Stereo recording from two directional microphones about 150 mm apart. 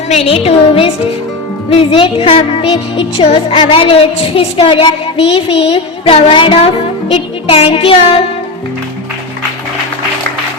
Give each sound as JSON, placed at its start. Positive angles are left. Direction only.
{"t": 0.1, "sound": "music", "side_deg": 40}